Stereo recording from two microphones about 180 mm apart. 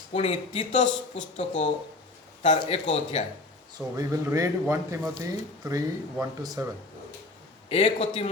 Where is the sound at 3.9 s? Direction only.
20° right (ahead or behind).